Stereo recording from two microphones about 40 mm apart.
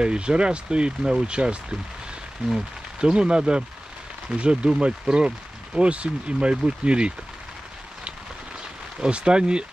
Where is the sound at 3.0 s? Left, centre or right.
Right.